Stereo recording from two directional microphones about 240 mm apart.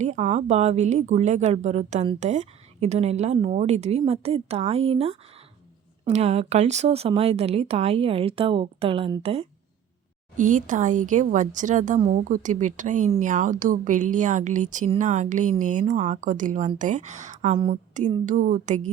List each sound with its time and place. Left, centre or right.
0.0 s a woman's voice: right